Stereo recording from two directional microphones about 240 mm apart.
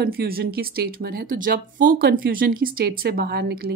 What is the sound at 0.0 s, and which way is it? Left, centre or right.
Speech, right.